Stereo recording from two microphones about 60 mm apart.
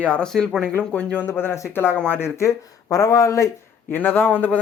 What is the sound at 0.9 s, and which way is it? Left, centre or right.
Speech, left.